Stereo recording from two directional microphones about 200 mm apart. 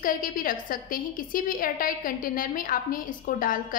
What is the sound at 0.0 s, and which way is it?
A woman's voice, 45° left (ahead or behind).